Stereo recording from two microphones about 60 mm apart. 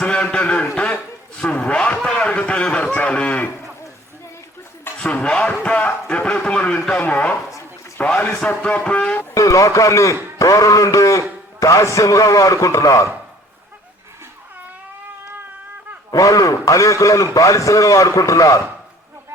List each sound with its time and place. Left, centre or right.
0.0 s a sound: centre
2.4 s a man's voice: centre
4.9 s a man's voice: centre
8.2 s a man's voice: centre
9.3 s a man's voice: left
16.1 s a man's voice: left